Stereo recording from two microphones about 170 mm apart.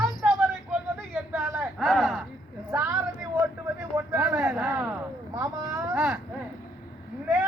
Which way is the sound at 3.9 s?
10° right (ahead or behind).